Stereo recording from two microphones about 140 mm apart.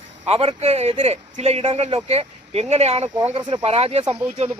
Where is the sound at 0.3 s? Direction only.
45° right (ahead or behind).